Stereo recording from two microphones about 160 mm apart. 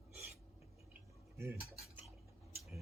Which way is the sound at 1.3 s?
20° right (ahead or behind).